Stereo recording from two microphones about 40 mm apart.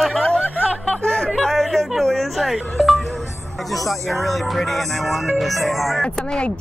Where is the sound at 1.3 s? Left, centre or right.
Centre.